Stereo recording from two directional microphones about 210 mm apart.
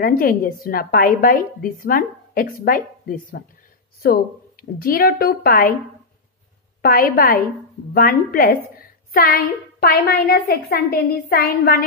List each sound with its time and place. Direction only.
0.0 s a woman's voice: 45° left (ahead or behind)
6.8 s a woman's voice: 45° left (ahead or behind)